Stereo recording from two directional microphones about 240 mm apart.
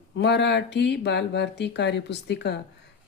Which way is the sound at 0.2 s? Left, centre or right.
Left.